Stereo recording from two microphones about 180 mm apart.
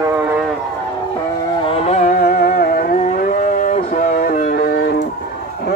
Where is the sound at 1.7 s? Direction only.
35° left (ahead or behind); by 4.7 s 55° left (ahead or behind).